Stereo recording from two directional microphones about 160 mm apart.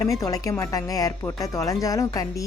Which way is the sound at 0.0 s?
20° left (ahead or behind).